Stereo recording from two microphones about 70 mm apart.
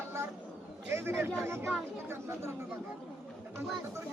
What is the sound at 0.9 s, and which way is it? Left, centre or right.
Speech, right.